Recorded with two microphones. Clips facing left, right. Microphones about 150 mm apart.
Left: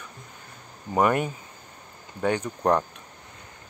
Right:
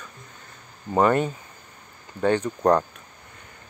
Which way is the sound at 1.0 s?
10° left (ahead or behind).